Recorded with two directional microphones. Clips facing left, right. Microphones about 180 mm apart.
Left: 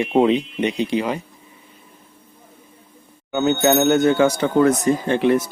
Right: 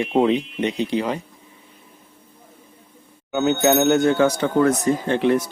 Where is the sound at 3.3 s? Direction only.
Centre (ahead or behind).